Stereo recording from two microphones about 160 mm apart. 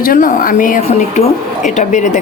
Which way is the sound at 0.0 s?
55° left (ahead or behind).